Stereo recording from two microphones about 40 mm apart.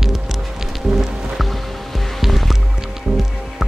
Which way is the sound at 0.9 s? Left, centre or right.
Centre.